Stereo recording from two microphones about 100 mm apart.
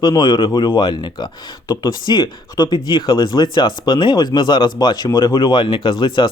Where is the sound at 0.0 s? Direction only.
45° left (ahead or behind).